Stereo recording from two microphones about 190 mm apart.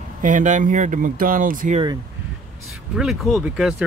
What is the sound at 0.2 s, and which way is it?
Speech, 40° right (ahead or behind).